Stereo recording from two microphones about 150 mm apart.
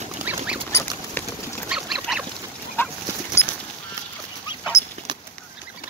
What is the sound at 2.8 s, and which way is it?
Dog, 15° left (ahead or behind).